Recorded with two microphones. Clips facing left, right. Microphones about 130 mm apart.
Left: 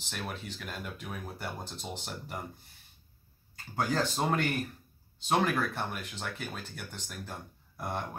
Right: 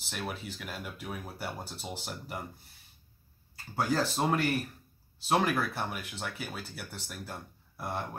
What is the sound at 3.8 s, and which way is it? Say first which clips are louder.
Speech: right 1 dB; 5° right (ahead or behind).